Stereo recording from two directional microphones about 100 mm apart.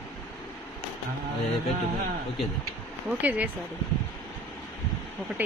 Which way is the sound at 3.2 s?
15° right (ahead or behind).